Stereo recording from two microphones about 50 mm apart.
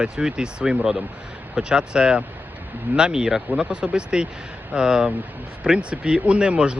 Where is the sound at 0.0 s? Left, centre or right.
Centre.